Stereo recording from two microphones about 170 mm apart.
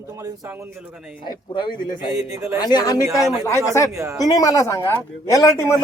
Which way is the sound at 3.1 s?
Centre (ahead or behind).